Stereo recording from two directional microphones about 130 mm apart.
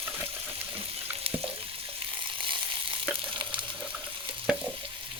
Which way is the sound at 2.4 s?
40° right (ahead or behind).